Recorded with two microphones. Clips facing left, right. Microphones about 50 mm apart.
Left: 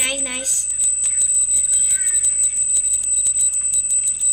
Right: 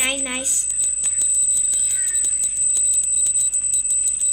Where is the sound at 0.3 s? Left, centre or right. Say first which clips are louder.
Right 1 dB; centre.